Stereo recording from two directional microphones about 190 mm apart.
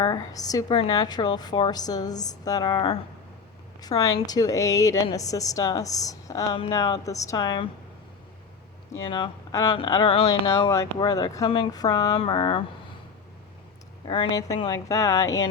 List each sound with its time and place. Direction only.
0.0 s a woman's voice: 20° left (ahead or behind)
9.0 s a woman's voice: 25° left (ahead or behind)
14.1 s a woman's voice: 20° left (ahead or behind)